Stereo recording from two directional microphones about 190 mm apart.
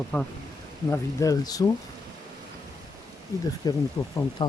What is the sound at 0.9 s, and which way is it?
Speech, 20° left (ahead or behind).